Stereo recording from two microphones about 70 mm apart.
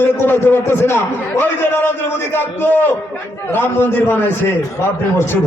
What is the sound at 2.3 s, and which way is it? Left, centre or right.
A man's voice, left.